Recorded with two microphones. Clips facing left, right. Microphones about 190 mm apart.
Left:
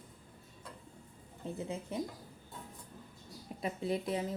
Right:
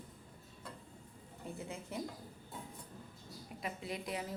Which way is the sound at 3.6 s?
30° left (ahead or behind).